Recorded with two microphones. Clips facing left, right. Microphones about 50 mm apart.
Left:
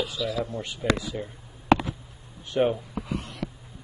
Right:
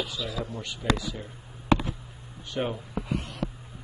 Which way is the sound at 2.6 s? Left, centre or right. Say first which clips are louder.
Left 7 dB; centre.